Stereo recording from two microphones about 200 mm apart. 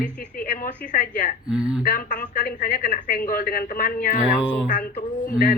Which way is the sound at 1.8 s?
45° left (ahead or behind).